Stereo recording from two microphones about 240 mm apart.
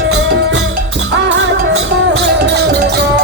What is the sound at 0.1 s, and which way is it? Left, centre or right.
Music, right.